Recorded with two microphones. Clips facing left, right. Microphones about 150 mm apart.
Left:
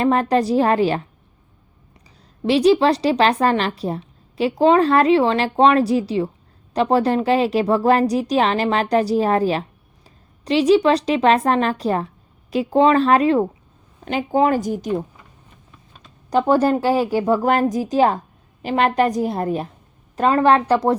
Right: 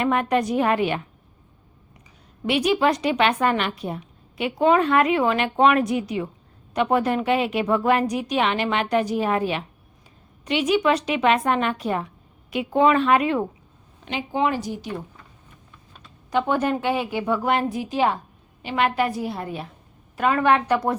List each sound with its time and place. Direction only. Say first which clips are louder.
0.0 s a woman's voice: left 4 dB; 35° left (ahead or behind)
2.4 s a woman's voice: left 6 dB; 30° left (ahead or behind)
14.0 s a woman's voice: left 6 dB; 45° left (ahead or behind)
16.3 s a woman's voice: left 6 dB; 35° left (ahead or behind)